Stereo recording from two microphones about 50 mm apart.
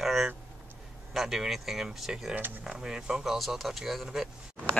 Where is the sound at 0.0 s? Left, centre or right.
Centre.